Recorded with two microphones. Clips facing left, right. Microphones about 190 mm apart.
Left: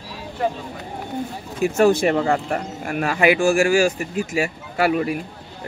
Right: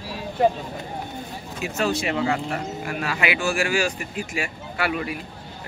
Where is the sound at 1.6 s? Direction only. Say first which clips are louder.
Left 9 dB; 50° left (ahead or behind).